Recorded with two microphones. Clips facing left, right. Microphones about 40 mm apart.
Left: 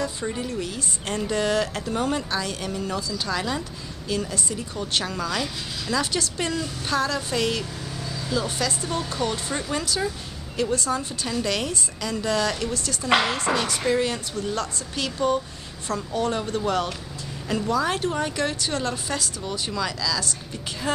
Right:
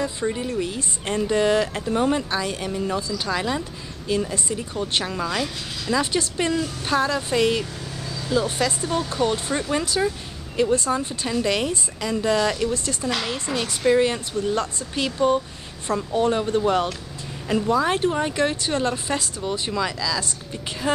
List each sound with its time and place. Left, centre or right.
0.2 s speech: centre
4.6 s speech: centre
13.1 s a woman's voice: left
13.8 s speech: centre